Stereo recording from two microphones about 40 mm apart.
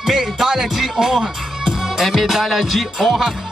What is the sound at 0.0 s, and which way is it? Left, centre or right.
Music, centre.